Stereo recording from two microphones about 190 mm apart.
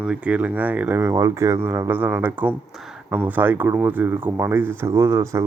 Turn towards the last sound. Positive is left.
turn(degrees=-15)  # may be behind; listen again after turning